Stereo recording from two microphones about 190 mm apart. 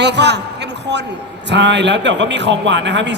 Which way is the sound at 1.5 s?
65° right (ahead or behind).